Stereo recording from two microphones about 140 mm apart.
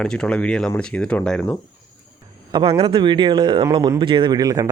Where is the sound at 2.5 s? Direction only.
35° right (ahead or behind).